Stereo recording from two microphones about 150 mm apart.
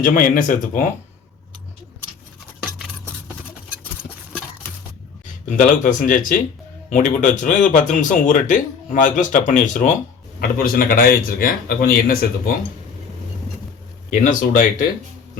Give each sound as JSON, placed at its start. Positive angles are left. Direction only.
{"t": 0.0, "sound": "speech", "side_deg": 65}
{"t": 5.5, "sound": "speech", "side_deg": 65}
{"t": 10.6, "sound": "speech", "side_deg": 70}
{"t": 14.1, "sound": "speech", "side_deg": 60}